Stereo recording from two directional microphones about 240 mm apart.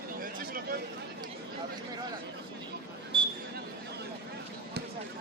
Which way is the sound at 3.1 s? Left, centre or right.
Right.